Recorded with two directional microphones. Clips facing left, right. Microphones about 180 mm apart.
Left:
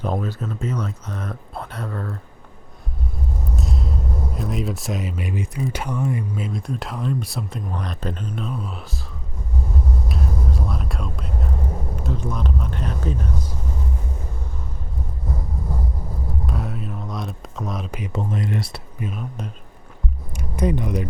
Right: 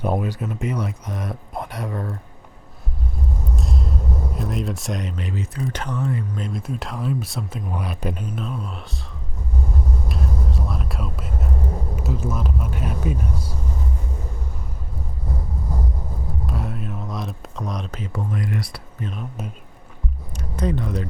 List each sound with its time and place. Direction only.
0.0 s speech: 10° right (ahead or behind)
3.5 s vehicle: centre (ahead or behind)
4.4 s speech: centre (ahead or behind)
10.1 s whispering: centre (ahead or behind)
11.9 s speech: 5° right (ahead or behind)
16.5 s a sound: centre (ahead or behind)
18.0 s speech: 25° left (ahead or behind)
18.9 s speech: 5° left (ahead or behind)
20.3 s a sound: 15° left (ahead or behind)